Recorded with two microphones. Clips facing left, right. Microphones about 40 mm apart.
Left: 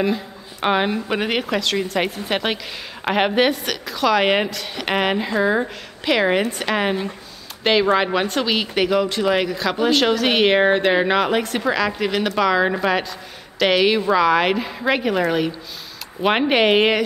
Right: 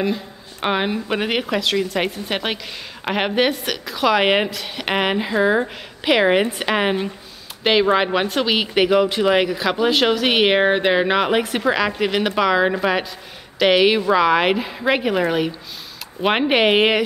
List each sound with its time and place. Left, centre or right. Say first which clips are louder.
0.0 s speech: left 1 dB; centre